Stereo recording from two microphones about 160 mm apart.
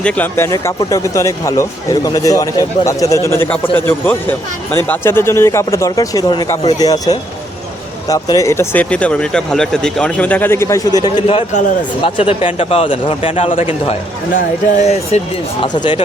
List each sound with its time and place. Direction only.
0.0 s speech: 10° left (ahead or behind); by 15.2 s 45° left (ahead or behind)
15.6 s speech: 30° left (ahead or behind)